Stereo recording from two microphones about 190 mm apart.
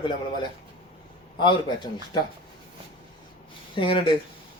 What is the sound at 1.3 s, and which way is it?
Speech, 25° left (ahead or behind).